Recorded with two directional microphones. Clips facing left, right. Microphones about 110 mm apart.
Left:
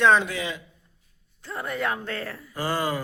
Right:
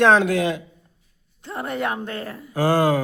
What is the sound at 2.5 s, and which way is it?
Speech, 90° right.